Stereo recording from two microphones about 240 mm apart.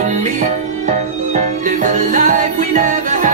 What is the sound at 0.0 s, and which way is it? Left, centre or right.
Music, right.